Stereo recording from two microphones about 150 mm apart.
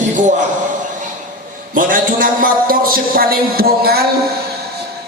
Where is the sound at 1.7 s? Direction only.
65° right (ahead or behind); by 4.0 s 90° right.